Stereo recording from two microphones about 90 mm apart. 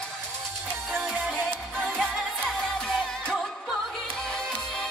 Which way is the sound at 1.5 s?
10° left (ahead or behind).